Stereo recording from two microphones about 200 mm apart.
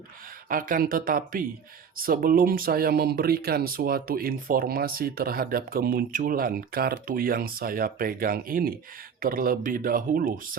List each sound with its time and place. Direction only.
0.4 s speech: 45° right (ahead or behind)